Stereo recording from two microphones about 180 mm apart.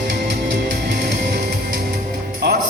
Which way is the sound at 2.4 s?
65° right (ahead or behind).